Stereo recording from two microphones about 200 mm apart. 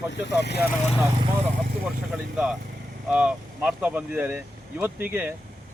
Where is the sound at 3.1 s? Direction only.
5° right (ahead or behind).